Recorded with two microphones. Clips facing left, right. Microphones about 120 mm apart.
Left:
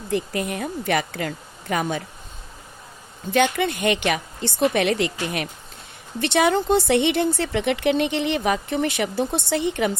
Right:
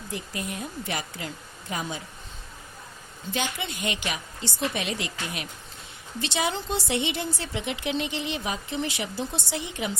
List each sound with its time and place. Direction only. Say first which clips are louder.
0.1 s speech: left 10 dB; 65° left (ahead or behind)
3.3 s speech: left 11 dB; 60° left (ahead or behind)